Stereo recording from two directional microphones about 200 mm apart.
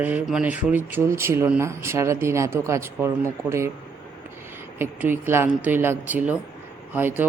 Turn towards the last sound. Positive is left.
turn(degrees=-10)  # may be behind; listen again after turning